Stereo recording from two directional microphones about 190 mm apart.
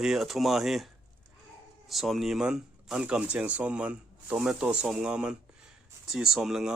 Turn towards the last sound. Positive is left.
turn(degrees=0)  # may be behind; listen again after turning